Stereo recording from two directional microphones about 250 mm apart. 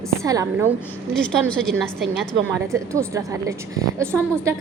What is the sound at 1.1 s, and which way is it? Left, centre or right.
A woman's voice, centre.